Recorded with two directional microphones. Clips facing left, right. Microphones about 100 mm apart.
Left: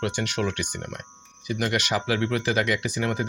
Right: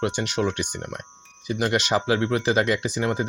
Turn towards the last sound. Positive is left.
turn(degrees=-25)  # may be behind; listen again after turning